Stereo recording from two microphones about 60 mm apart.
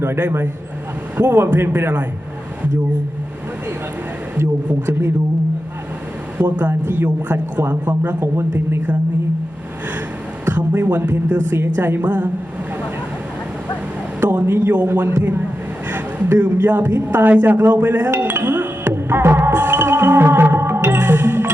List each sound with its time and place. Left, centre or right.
0.2 s a woman's voice: right
4.9 s speech: right
6.6 s a man's voice: right
8.2 s speech: right
10.4 s a woman's voice: right
14.2 s a man's voice: right
18.1 s music: right